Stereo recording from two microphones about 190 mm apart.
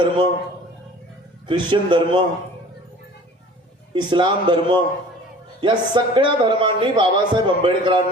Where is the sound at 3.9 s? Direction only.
25° right (ahead or behind).